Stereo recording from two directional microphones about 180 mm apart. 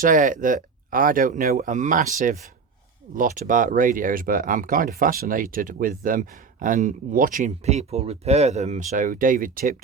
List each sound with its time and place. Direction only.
0.0 s speech: 45° right (ahead or behind)